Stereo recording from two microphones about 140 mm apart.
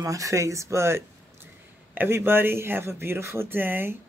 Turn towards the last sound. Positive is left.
turn(degrees=-15)  # may be behind; listen again after turning